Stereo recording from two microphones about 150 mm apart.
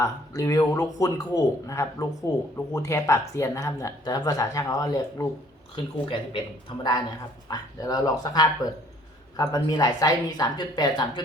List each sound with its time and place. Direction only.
0.0 s speech: 20° left (ahead or behind)
5.7 s speech: 35° left (ahead or behind)
7.4 s speech: 25° left (ahead or behind)